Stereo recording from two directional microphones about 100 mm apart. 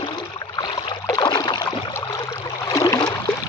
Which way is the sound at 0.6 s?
50° left (ahead or behind).